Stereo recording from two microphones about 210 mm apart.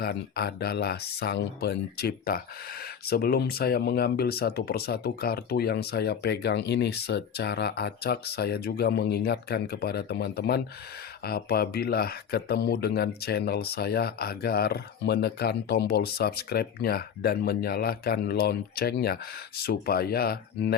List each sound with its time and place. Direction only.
0.0 s speech: 50° left (ahead or behind)